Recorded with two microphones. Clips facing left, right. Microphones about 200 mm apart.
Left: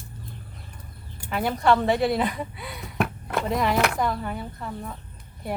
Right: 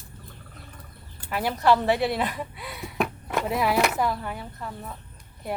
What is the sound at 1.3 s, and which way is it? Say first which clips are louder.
Speech: even; 5° right (ahead or behind).